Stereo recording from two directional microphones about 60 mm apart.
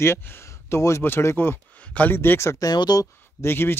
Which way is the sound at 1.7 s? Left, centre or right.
Left.